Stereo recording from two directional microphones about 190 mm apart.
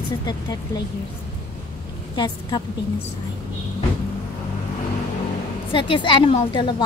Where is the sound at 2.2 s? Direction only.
20° left (ahead or behind).